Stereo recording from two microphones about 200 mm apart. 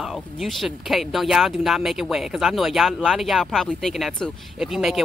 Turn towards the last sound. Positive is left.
turn(degrees=0)  # may be behind; listen again after turning